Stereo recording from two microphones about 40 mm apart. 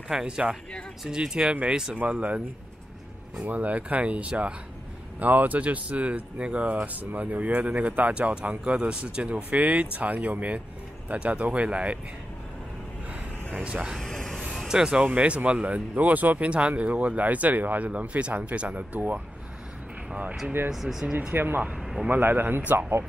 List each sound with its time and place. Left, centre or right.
0.1 s speech: centre; by 2.4 s right
3.4 s speech: right
5.2 s speech: right
8.1 s speech: right
13.9 s a sound: centre
14.7 s speech: centre
15.0 s speech: right
16.4 s speech: right
20.7 s speech: centre
21.3 s speech: right
21.7 s a sound: centre
22.1 s speech: right